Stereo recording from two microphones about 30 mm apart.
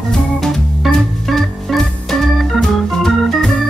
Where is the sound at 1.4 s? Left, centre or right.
Centre.